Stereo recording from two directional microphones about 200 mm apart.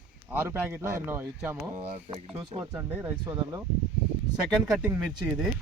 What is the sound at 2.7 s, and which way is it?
Speech, 5° right (ahead or behind).